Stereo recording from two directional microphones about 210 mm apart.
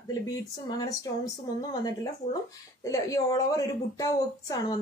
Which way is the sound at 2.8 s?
15° left (ahead or behind).